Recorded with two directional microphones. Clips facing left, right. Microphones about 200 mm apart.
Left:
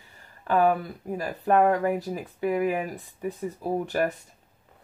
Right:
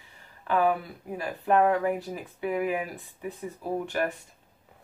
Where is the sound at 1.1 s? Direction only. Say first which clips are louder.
Left 2 dB; 40° left (ahead or behind).